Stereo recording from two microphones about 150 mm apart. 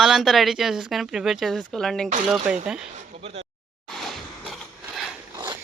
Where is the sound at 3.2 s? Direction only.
40° right (ahead or behind).